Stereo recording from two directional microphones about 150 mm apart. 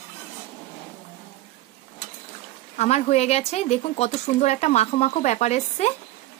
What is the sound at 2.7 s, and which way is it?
Speech, 45° left (ahead or behind).